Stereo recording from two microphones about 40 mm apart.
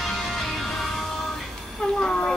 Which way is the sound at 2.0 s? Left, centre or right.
Centre.